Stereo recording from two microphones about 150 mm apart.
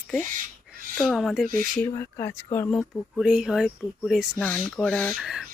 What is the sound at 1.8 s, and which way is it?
Speech, 20° left (ahead or behind).